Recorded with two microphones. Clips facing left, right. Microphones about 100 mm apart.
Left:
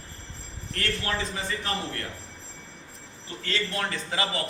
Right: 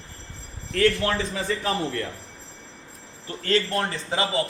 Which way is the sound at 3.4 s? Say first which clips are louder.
Right 7 dB; 45° right (ahead or behind).